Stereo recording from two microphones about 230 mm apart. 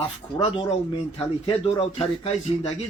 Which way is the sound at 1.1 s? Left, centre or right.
Left.